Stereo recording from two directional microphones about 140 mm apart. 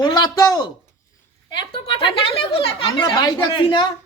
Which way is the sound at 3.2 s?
30° left (ahead or behind).